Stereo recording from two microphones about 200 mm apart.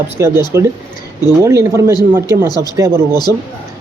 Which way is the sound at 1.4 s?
15° right (ahead or behind).